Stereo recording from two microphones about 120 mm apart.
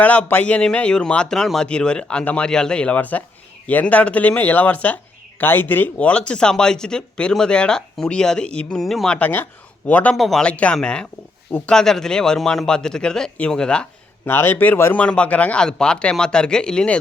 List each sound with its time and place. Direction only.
0.0 s a man's voice: 15° left (ahead or behind)
9.1 s speech: 15° left (ahead or behind)
10.2 s a man's voice: centre (ahead or behind)
14.3 s a man's voice: 20° left (ahead or behind)